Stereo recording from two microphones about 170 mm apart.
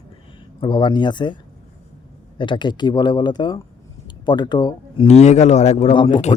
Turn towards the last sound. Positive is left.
turn(degrees=30)  # may be behind; listen again after turning